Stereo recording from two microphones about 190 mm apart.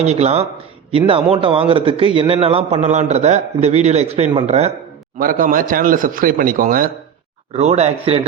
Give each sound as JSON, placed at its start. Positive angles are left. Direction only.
{"t": 0.0, "sound": "a man's voice", "side_deg": -35}
{"t": 5.2, "sound": "speech", "side_deg": -45}
{"t": 7.5, "sound": "a man's voice", "side_deg": -35}